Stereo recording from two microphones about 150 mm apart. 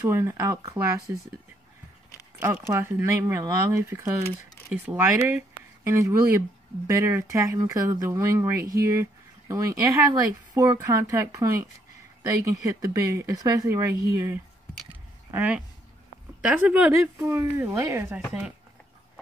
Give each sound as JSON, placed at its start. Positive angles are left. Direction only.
{"t": 0.0, "sound": "speech", "side_deg": -20}
{"t": 2.4, "sound": "speech", "side_deg": -15}